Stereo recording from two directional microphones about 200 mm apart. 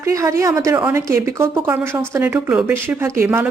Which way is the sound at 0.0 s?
15° right (ahead or behind).